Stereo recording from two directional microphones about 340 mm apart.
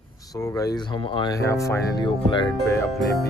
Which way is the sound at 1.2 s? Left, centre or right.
Centre.